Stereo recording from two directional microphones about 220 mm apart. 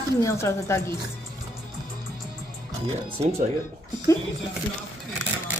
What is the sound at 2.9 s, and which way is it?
Speech, 30° right (ahead or behind).